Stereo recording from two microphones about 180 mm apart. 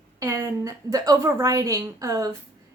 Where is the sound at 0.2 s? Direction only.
15° right (ahead or behind).